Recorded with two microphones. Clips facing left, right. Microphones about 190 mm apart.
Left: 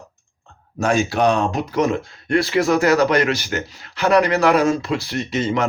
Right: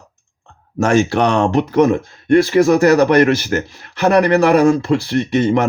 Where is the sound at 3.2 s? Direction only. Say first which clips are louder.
Right 6 dB; 55° right (ahead or behind).